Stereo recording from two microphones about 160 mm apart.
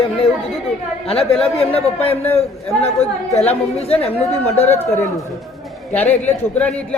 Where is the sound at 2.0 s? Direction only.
10° left (ahead or behind).